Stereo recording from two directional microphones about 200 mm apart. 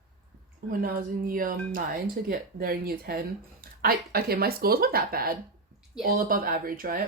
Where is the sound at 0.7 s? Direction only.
45° right (ahead or behind).